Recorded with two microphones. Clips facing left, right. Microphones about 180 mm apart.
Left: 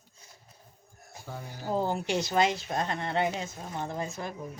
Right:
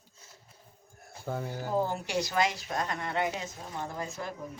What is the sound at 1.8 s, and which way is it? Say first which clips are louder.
A woman's voice: left 2 dB; 20° left (ahead or behind).